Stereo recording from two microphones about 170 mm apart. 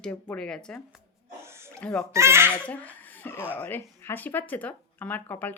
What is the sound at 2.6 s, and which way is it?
Speech, 10° left (ahead or behind).